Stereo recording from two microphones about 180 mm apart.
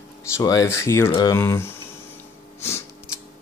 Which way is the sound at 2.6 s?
15° left (ahead or behind).